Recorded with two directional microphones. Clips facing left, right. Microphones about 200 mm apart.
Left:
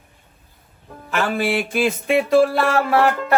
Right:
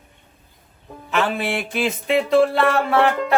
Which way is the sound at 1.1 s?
Centre (ahead or behind).